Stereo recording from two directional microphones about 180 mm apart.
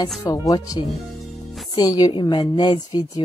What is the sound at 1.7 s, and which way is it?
A woman's voice, 20° left (ahead or behind).